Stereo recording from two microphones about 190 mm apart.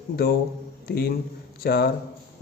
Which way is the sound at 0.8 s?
55° left (ahead or behind).